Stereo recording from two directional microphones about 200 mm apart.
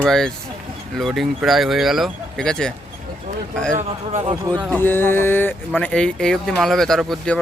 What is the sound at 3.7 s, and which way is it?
Speech, 35° right (ahead or behind).